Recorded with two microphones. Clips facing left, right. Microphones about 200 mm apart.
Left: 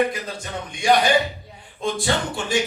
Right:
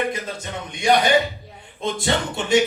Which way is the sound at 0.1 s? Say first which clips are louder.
Right 1 dB; 20° right (ahead or behind).